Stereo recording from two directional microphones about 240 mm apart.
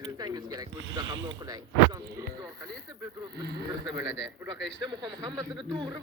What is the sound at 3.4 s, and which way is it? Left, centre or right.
Speech, right.